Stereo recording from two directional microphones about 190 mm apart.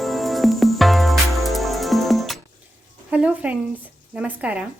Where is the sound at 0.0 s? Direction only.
Centre (ahead or behind).